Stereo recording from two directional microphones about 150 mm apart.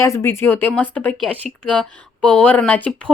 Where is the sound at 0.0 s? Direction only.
15° left (ahead or behind).